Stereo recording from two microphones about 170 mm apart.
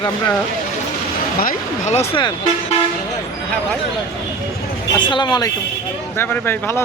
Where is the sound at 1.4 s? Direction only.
50° left (ahead or behind).